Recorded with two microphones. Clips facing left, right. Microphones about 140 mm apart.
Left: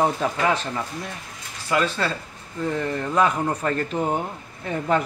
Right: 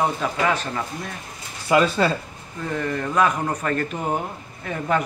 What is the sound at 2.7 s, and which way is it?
Speech, 20° left (ahead or behind).